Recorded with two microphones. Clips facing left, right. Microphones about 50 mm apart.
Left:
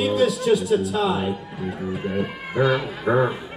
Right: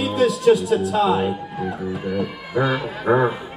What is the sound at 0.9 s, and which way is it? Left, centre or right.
Speech, right.